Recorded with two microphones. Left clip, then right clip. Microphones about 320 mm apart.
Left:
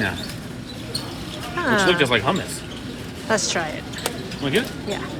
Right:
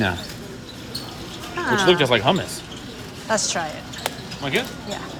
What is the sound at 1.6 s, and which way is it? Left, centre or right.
Speech, centre.